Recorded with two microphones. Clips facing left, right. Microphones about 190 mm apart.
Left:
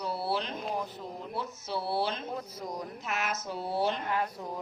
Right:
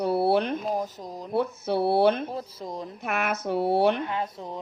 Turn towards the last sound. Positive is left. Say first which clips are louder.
# right 1 dB
turn(degrees=-25)  # may be behind; listen again after turning